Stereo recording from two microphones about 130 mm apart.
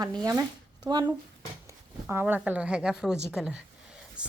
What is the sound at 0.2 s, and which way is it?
Speech, 30° right (ahead or behind).